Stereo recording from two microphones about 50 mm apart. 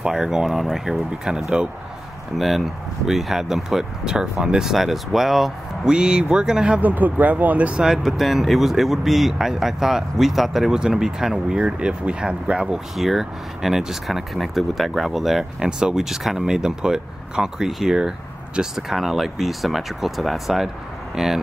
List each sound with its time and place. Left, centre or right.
0.0 s speech: centre
2.3 s speech: centre
5.9 s speech: centre
6.8 s speech: right
7.8 s speech: centre
12.9 s speech: centre